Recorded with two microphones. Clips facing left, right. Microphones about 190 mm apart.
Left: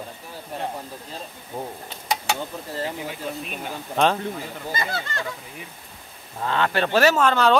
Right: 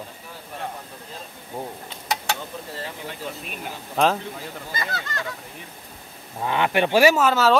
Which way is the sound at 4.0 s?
5° right (ahead or behind).